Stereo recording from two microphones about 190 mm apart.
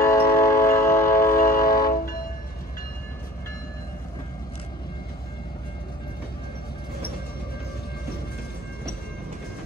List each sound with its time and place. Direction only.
0.0 s train: 15° left (ahead or behind)
1.2 s train: 50° left (ahead or behind)